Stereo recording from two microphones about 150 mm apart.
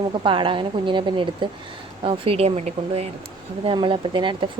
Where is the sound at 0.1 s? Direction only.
35° right (ahead or behind).